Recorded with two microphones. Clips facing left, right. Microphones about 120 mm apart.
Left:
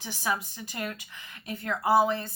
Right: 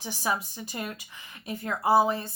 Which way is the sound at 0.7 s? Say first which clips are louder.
Left 1 dB; 15° right (ahead or behind).